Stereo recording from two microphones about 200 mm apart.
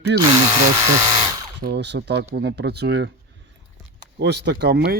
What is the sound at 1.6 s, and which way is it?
Speech, 60° right (ahead or behind).